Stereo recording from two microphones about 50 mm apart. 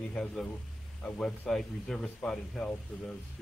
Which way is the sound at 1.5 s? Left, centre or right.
Centre.